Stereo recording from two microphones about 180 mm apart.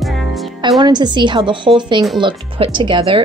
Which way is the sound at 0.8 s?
25° right (ahead or behind).